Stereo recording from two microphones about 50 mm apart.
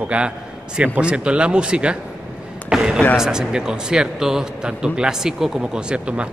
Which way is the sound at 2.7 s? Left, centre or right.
Centre.